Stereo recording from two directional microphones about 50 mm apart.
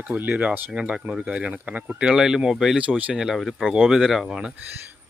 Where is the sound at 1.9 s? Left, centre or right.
Centre.